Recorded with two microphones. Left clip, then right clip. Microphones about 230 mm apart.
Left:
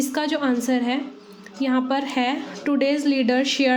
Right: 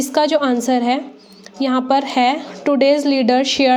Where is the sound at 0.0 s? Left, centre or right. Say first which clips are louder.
Right 8 dB; right.